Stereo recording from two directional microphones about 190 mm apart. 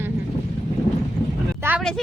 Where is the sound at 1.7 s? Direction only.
10° right (ahead or behind).